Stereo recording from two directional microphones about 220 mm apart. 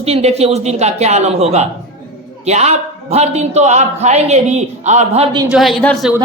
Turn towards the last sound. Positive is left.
turn(degrees=0)  # may be behind; listen again after turning